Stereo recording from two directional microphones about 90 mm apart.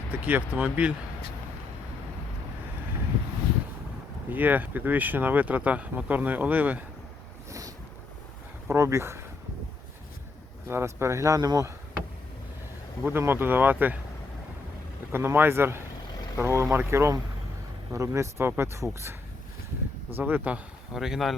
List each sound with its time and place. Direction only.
0.1 s speech: 20° right (ahead or behind)
4.3 s speech: 20° right (ahead or behind)
8.6 s speech: 30° right (ahead or behind)
10.7 s speech: 30° right (ahead or behind)
13.0 s speech: 25° right (ahead or behind)
15.1 s speech: 25° right (ahead or behind)
20.1 s speech: 20° right (ahead or behind)
20.9 s speech: 5° right (ahead or behind)